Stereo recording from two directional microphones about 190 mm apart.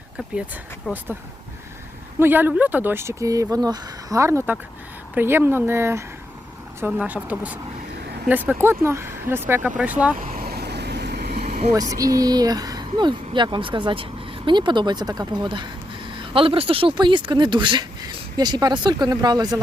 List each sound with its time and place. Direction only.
0.9 s speech: 5° right (ahead or behind)
2.1 s speech: 10° right (ahead or behind)
10.2 s vehicle: 45° right (ahead or behind)
11.7 s speech: 20° right (ahead or behind)